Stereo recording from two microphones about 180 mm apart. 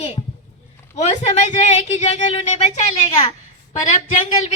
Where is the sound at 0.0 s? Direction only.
35° left (ahead or behind).